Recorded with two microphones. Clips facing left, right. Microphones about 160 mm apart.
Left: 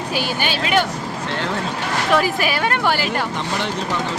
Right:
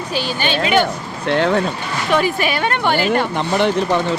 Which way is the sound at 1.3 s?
60° right (ahead or behind).